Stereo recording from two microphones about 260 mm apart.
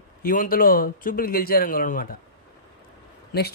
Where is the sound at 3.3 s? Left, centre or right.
Left.